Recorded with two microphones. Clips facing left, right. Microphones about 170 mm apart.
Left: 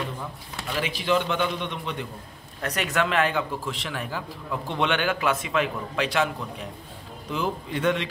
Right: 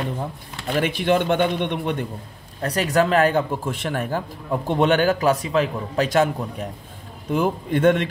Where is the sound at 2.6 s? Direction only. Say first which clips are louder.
Right 6 dB; 35° right (ahead or behind).